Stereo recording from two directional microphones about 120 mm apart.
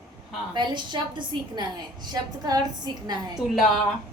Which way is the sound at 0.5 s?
40° right (ahead or behind).